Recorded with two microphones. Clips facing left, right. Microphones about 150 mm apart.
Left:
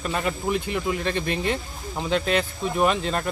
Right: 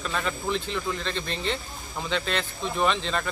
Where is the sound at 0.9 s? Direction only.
55° left (ahead or behind).